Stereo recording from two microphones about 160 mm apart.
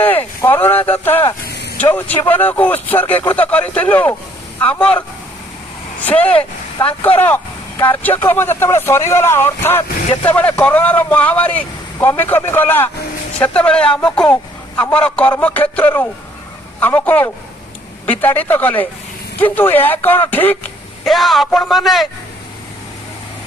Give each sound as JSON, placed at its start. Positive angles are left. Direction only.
{"t": 0.0, "sound": "a sound", "side_deg": 15}
{"t": 1.5, "sound": "vehicle", "side_deg": 90}
{"t": 1.8, "sound": "speech", "side_deg": 10}
{"t": 6.1, "sound": "speech", "side_deg": 10}
{"t": 21.0, "sound": "a man's voice", "side_deg": 0}